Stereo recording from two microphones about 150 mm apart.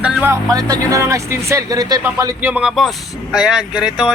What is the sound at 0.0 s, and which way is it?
Speech, 10° right (ahead or behind).